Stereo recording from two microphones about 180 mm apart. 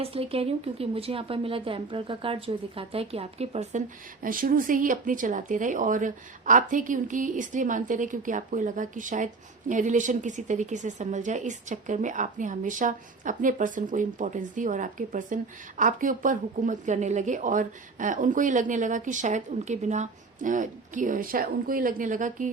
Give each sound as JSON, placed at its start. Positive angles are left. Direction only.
{"t": 0.0, "sound": "a woman's voice", "side_deg": -30}